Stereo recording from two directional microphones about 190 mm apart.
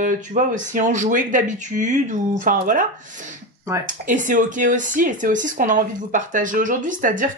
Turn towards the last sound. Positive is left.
turn(degrees=-45)  # may be behind; listen again after turning